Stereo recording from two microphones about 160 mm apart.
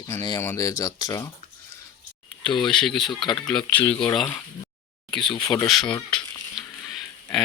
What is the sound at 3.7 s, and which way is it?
Speech, 10° left (ahead or behind).